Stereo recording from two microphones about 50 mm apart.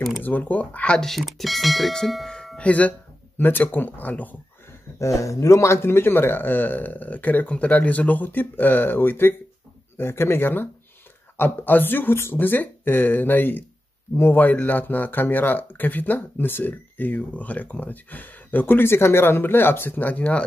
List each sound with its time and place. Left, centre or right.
0.2 s speech: left
0.9 s speech: centre
2.2 s music: centre
3.3 s speech: left
4.9 s speech: left
5.8 s speech: left